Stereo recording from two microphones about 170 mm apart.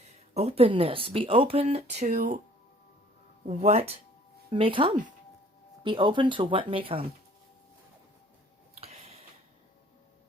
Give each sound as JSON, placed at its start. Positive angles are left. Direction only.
{"t": 0.3, "sound": "speech", "side_deg": -35}
{"t": 3.4, "sound": "speech", "side_deg": -40}
{"t": 8.8, "sound": "a sound", "side_deg": -40}